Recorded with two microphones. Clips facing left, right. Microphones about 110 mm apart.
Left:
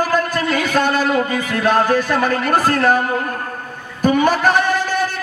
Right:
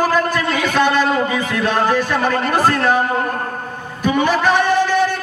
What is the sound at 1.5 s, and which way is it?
Music, 45° left (ahead or behind).